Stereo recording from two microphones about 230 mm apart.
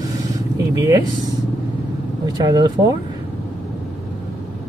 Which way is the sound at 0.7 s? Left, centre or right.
Centre.